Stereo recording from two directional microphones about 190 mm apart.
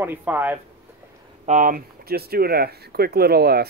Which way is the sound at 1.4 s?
45° right (ahead or behind).